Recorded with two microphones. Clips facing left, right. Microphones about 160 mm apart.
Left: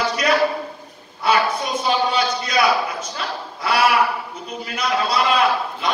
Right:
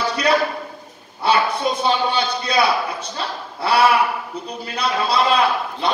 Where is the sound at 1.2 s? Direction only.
30° right (ahead or behind).